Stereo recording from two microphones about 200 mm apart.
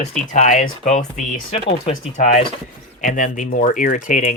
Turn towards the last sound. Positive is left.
turn(degrees=40)  # may be behind; listen again after turning